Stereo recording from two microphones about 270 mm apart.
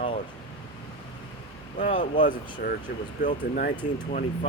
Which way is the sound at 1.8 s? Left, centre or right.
Left.